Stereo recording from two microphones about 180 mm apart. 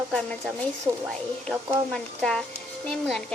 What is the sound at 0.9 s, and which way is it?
Speech, 15° right (ahead or behind).